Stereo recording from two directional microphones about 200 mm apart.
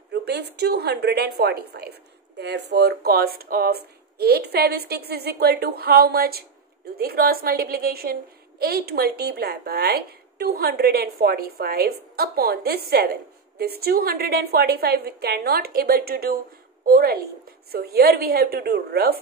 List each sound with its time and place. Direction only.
0.1 s a woman's voice: 55° right (ahead or behind)